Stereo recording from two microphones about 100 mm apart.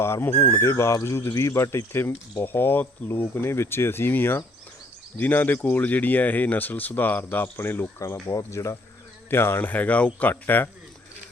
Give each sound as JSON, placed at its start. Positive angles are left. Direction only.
{"t": 0.0, "sound": "speech", "side_deg": 25}
{"t": 0.6, "sound": "speech", "side_deg": 25}